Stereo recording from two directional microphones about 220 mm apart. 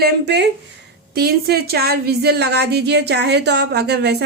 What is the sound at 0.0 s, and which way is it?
A woman's voice, 50° right (ahead or behind).